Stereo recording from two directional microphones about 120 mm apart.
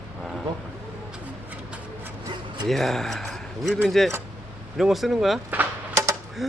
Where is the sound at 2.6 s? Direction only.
Centre (ahead or behind).